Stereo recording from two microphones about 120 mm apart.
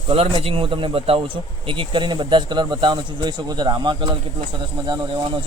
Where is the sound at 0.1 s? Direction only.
50° right (ahead or behind).